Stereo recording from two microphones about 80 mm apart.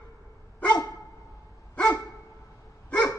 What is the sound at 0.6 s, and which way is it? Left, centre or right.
Dog, left.